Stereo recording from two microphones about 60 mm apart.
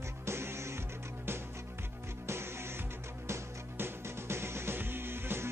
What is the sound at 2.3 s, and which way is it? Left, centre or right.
Music, right.